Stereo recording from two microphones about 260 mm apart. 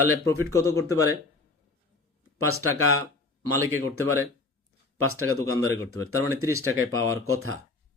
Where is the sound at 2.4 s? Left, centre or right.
Right.